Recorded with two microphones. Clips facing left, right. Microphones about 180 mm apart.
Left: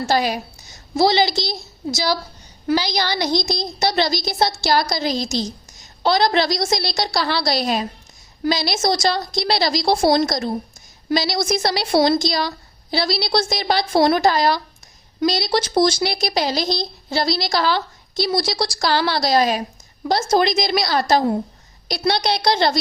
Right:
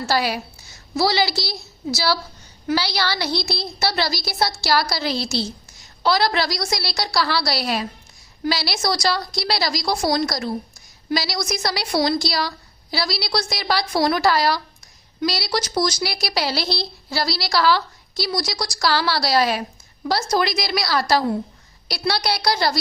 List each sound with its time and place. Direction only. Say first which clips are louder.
0.0 s a woman's voice: left 2 dB; 20° left (ahead or behind)
2.7 s a woman's voice: left 2 dB; 15° left (ahead or behind)